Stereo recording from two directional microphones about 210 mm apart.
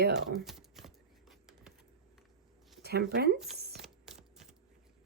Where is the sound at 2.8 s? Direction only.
50° right (ahead or behind).